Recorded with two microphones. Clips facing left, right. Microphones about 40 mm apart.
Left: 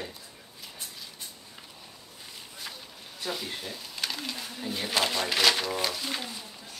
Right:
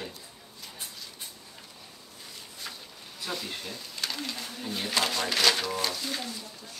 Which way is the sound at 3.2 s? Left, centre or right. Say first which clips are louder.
Left 1 dB; centre.